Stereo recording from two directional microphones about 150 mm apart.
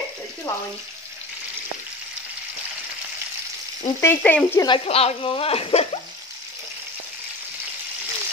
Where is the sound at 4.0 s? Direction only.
15° left (ahead or behind).